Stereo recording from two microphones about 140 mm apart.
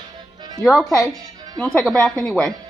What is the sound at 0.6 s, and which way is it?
A woman's voice, centre (ahead or behind).